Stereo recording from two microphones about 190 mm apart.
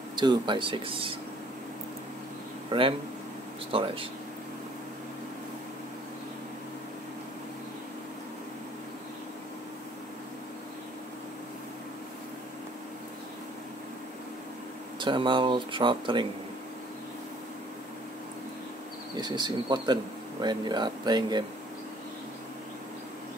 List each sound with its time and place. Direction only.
0.1 s speech: 25° right (ahead or behind)
2.7 s speech: 25° right (ahead or behind)
15.0 s speech: 25° right (ahead or behind)
19.1 s speech: 20° right (ahead or behind)